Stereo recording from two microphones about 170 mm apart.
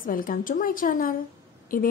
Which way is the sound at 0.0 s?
55° left (ahead or behind).